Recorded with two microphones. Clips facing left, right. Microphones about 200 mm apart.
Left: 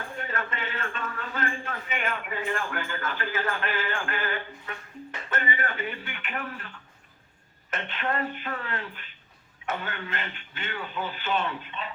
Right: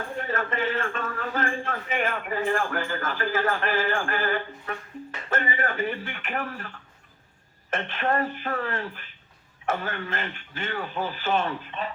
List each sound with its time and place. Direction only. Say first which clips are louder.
0.3 s a man's voice: right 8 dB; 45° right (ahead or behind)
7.7 s a man's voice: right 4 dB; 45° right (ahead or behind)
9.8 s a man's voice: right 4 dB; 45° right (ahead or behind)